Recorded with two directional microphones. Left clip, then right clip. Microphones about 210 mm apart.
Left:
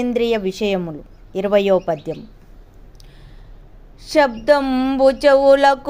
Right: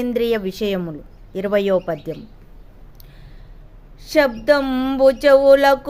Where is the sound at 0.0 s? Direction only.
Centre (ahead or behind).